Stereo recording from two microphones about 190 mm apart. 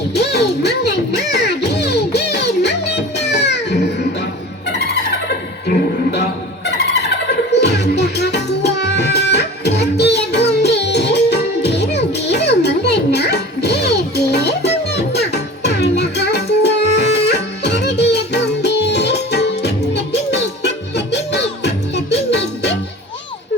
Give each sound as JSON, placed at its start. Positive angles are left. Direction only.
{"t": 0.1, "sound": "music", "side_deg": 60}
{"t": 5.6, "sound": "music", "side_deg": 60}
{"t": 6.7, "sound": "vehicle", "side_deg": 65}
{"t": 7.5, "sound": "music", "side_deg": 65}